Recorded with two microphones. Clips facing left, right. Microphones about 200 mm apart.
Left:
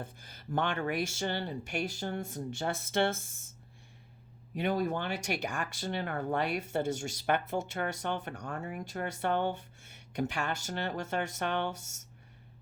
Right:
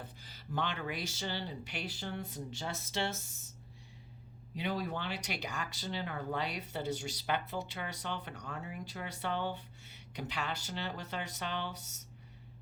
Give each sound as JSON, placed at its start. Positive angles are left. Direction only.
{"t": 0.0, "sound": "speech", "side_deg": 50}
{"t": 4.5, "sound": "speech", "side_deg": 50}